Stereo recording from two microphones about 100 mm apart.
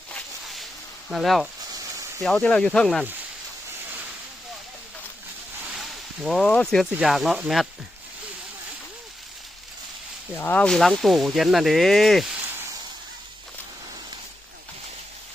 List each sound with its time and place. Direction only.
1.1 s speech: centre (ahead or behind)
5.6 s a sound: 5° right (ahead or behind)
6.5 s speech: 5° left (ahead or behind)
7.0 s speech: 5° right (ahead or behind)
10.3 s speech: 15° left (ahead or behind); by 12.3 s centre (ahead or behind)